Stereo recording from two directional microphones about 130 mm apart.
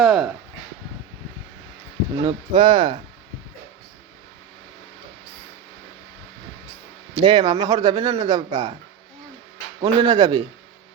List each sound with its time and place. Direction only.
0.0 s speech: centre (ahead or behind)
2.2 s speech: 40° right (ahead or behind)
7.2 s speech: 35° right (ahead or behind)
7.9 s speech: 50° right (ahead or behind)
8.2 s speech: 30° right (ahead or behind)
9.8 s speech: 35° right (ahead or behind)